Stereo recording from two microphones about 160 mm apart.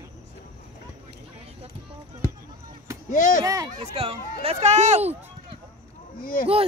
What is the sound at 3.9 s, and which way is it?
Speech, 40° right (ahead or behind).